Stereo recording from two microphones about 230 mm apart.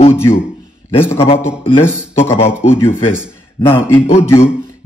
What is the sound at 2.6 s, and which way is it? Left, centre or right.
A man's voice, centre.